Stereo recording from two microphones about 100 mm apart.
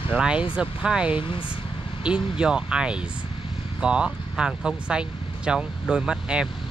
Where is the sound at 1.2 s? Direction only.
65° left (ahead or behind).